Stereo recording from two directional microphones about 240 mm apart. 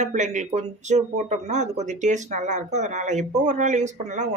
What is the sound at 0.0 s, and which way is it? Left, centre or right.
Speech, right.